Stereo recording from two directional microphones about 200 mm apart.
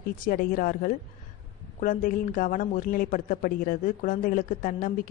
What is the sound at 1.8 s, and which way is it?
A woman's voice, 40° left (ahead or behind).